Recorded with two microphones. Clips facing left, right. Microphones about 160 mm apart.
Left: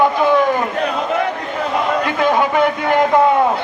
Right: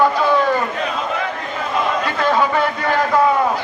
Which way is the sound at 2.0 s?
15° left (ahead or behind).